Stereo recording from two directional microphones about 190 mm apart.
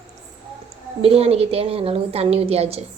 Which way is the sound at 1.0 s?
30° right (ahead or behind).